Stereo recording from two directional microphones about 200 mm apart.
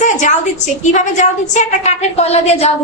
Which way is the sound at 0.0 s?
35° left (ahead or behind).